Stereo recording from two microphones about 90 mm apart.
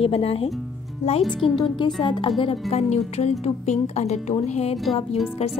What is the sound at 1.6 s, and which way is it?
Speech, 65° left (ahead or behind).